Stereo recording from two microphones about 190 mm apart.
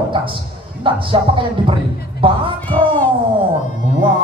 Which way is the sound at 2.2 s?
25° right (ahead or behind).